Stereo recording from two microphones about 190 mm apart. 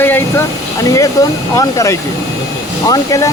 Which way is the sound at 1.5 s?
15° left (ahead or behind).